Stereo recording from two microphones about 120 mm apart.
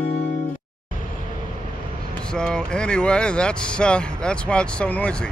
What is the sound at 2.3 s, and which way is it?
Speech, 5° left (ahead or behind).